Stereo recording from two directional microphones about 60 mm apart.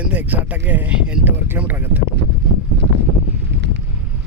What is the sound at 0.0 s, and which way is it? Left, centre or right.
Speech, right.